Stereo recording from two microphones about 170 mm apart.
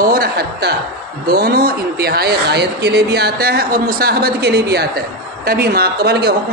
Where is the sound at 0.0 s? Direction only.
60° right (ahead or behind).